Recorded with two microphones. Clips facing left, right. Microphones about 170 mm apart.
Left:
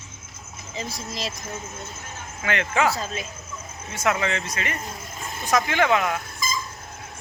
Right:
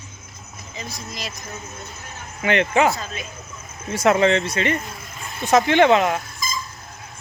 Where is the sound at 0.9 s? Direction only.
30° left (ahead or behind).